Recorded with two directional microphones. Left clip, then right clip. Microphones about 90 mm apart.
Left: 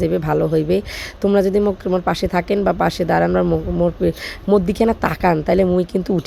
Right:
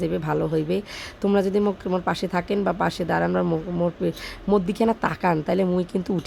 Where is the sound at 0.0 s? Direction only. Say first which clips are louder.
Left 7 dB; 30° left (ahead or behind).